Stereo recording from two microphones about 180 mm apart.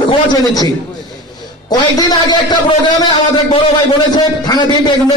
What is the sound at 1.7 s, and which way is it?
A man's voice, 20° left (ahead or behind).